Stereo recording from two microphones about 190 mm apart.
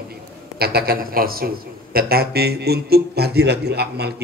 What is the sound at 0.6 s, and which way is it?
A man's voice, 55° right (ahead or behind).